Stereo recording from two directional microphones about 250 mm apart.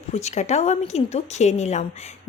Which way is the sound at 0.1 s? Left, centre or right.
Left.